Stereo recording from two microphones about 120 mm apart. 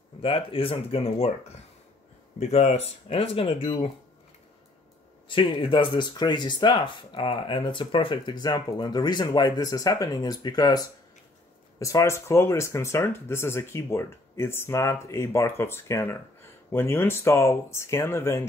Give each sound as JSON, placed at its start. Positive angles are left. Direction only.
{"t": 0.2, "sound": "speech", "side_deg": 50}
{"t": 2.3, "sound": "speech", "side_deg": 65}
{"t": 5.3, "sound": "speech", "side_deg": 45}